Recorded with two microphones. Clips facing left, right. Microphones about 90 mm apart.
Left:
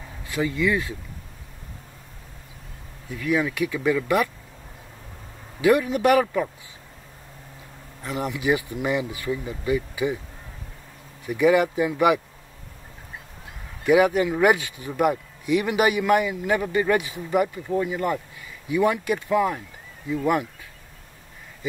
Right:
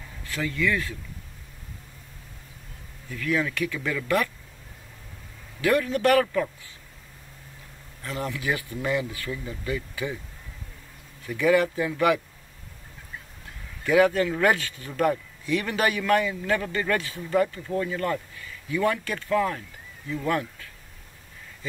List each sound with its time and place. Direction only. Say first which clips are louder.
0.2 s speech: left 3 dB; 15° left (ahead or behind)
3.1 s speech: left 3 dB; 15° left (ahead or behind)
5.6 s speech: left 3 dB; 15° left (ahead or behind)
8.0 s speech: left 4 dB; 20° left (ahead or behind)
11.2 s speech: left 3 dB; 15° left (ahead or behind)
13.8 s speech: left 2 dB; 15° left (ahead or behind)